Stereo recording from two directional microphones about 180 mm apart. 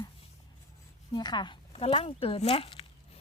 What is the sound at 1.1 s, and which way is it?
Speech, 25° left (ahead or behind).